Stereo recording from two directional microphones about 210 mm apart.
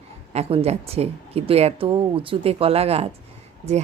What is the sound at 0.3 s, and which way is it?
Speech, 30° right (ahead or behind).